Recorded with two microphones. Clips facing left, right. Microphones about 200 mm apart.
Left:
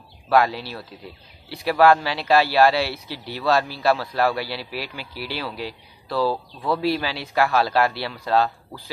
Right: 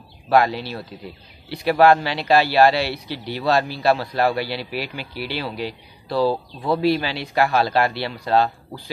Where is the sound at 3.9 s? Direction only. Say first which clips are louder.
Right 2 dB; 20° right (ahead or behind).